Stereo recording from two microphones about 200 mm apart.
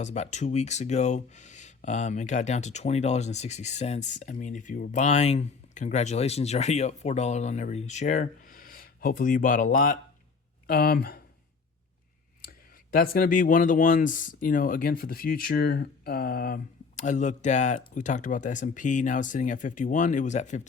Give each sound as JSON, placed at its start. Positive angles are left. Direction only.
{"t": 0.0, "sound": "speech", "side_deg": 35}
{"t": 12.5, "sound": "speech", "side_deg": 45}
{"t": 17.0, "sound": "speech", "side_deg": 35}